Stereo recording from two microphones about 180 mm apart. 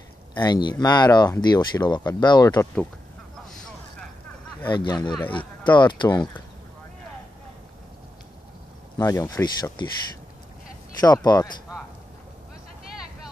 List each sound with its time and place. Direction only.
0.4 s speech: 25° left (ahead or behind)
4.6 s speech: 25° left (ahead or behind)
8.9 s speech: 20° left (ahead or behind)
11.0 s speech: 20° left (ahead or behind)